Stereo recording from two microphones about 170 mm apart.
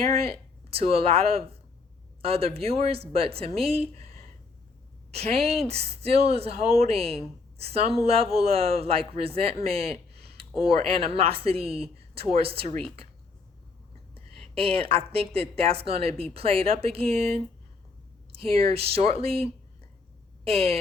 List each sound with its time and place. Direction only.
0.3 s a woman's voice: 35° right (ahead or behind)
5.1 s a woman's voice: 35° right (ahead or behind)
14.3 s a woman's voice: 35° right (ahead or behind)